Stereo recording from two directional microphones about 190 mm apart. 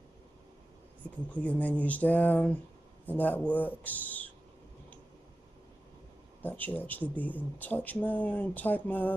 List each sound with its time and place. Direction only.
1.3 s speech: 5° left (ahead or behind)
6.4 s speech: 10° left (ahead or behind)